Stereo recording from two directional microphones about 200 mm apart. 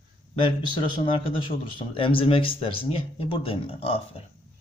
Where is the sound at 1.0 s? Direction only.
25° left (ahead or behind).